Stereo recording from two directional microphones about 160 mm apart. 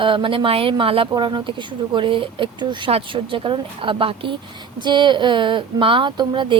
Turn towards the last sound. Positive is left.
turn(degrees=-30)  # may be behind; listen again after turning